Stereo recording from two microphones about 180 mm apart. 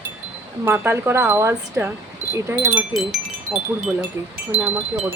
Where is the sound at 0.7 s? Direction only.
10° right (ahead or behind).